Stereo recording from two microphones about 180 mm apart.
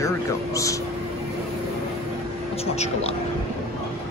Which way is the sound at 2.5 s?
35° left (ahead or behind).